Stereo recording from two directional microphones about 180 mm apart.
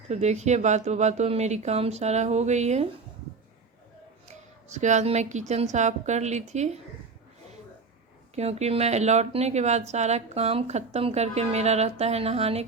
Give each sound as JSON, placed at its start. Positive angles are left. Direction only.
{"t": 0.1, "sound": "speech", "side_deg": -40}
{"t": 4.3, "sound": "speech", "side_deg": -40}
{"t": 8.4, "sound": "speech", "side_deg": -35}